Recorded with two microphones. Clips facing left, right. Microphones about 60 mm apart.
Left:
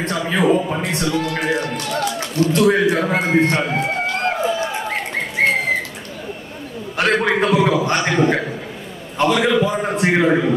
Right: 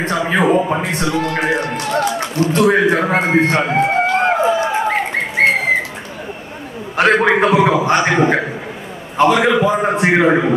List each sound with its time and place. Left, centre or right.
0.1 s a man's voice: right
3.8 s a sound: centre
4.7 s bird: centre
7.0 s a man's voice: right